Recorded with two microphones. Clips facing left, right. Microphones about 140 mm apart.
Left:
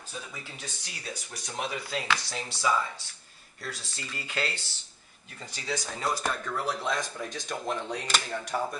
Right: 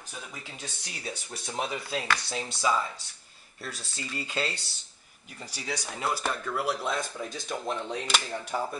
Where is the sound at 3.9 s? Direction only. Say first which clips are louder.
Right 3 dB; 20° right (ahead or behind).